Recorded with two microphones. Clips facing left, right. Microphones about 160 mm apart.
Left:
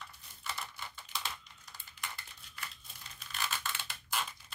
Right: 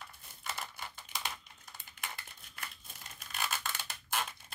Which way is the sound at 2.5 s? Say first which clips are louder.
Even; 50° right (ahead or behind).